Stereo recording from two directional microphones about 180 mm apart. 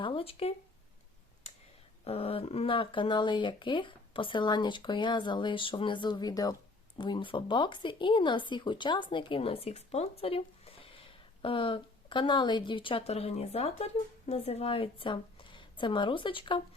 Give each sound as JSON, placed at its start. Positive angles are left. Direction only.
{"t": 0.0, "sound": "speech", "side_deg": 30}
{"t": 2.0, "sound": "a woman's voice", "side_deg": 35}